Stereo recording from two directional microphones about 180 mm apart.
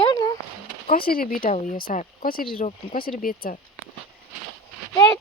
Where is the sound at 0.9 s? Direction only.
55° left (ahead or behind).